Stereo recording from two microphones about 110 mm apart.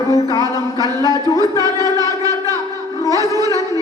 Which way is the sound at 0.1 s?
30° left (ahead or behind).